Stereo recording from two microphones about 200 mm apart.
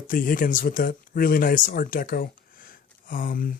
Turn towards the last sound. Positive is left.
turn(degrees=45)  # may be behind; listen again after turning